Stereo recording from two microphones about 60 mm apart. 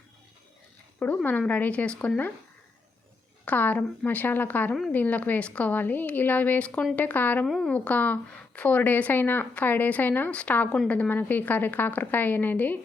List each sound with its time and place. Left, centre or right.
0.9 s speech: left
3.4 s a woman's voice: left
7.4 s speech: centre
7.7 s a woman's voice: left